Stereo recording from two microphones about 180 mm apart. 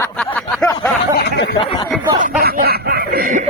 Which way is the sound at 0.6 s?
5° left (ahead or behind).